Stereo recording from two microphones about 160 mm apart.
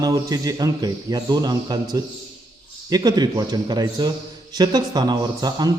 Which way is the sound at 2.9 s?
25° right (ahead or behind).